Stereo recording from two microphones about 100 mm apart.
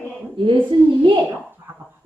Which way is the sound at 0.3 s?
55° right (ahead or behind).